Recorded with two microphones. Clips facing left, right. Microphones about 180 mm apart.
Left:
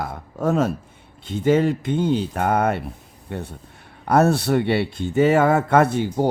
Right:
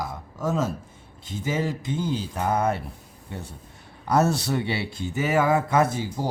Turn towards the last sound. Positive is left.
turn(degrees=65)  # may be behind; listen again after turning